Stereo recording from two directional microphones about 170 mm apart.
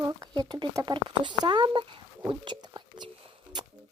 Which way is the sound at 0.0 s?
20° right (ahead or behind).